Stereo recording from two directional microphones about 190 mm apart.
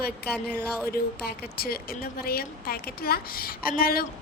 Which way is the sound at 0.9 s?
55° left (ahead or behind).